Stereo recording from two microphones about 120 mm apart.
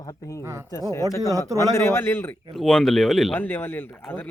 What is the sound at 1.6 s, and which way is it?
Speech, 20° left (ahead or behind).